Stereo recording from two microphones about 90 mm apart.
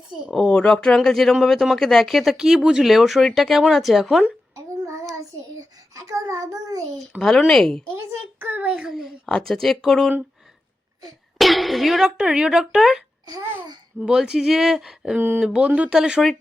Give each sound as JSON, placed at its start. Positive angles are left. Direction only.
{"t": 0.2, "sound": "speech", "side_deg": 0}
{"t": 0.4, "sound": "speech", "side_deg": 10}
{"t": 4.5, "sound": "child singing", "side_deg": -40}
{"t": 7.2, "sound": "speech", "side_deg": 5}
{"t": 8.4, "sound": "a child's voice", "side_deg": -20}
{"t": 8.9, "sound": "speech", "side_deg": 0}
{"t": 11.3, "sound": "speech", "side_deg": 0}
{"t": 14.0, "sound": "speech", "side_deg": -10}